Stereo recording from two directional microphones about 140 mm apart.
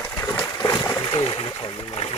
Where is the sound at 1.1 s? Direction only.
40° left (ahead or behind).